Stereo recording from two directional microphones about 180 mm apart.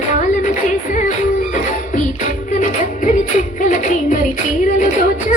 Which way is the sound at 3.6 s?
45° left (ahead or behind).